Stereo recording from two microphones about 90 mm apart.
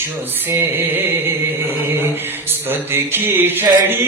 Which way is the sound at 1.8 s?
30° right (ahead or behind).